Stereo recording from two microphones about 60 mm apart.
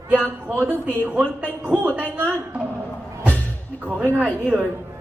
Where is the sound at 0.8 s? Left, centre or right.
Right.